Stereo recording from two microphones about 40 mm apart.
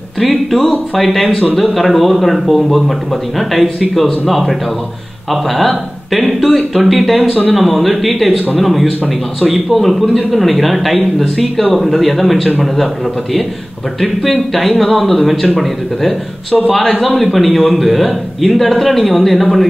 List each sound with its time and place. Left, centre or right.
0.2 s a man's voice: centre